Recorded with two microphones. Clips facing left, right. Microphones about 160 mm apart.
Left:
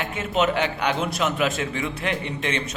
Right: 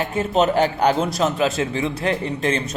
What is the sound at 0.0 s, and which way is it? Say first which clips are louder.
A man's voice: right 4 dB; 40° right (ahead or behind).